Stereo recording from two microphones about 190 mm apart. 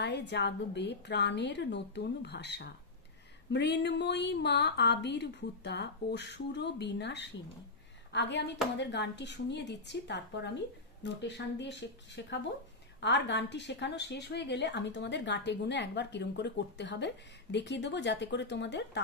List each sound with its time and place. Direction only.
0.0 s a woman's voice: 65° left (ahead or behind)